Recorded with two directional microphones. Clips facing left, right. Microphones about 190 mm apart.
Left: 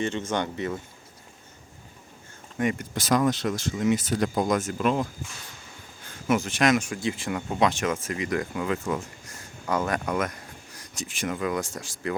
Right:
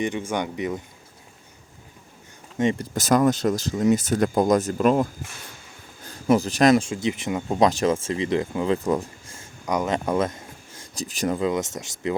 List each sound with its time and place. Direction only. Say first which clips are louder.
0.0 s speech: right 2 dB; 10° right (ahead or behind)
2.6 s speech: right 4 dB; 25° right (ahead or behind)
2.9 s speech: right 4 dB; 45° right (ahead or behind)
6.1 s speech: right 5 dB; 35° right (ahead or behind)
7.6 s speech: right 5 dB; 35° right (ahead or behind)
11.3 s speech: right 4 dB; 20° right (ahead or behind)